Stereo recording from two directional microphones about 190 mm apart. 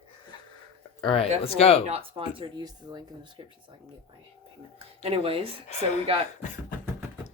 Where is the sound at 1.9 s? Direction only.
30° right (ahead or behind).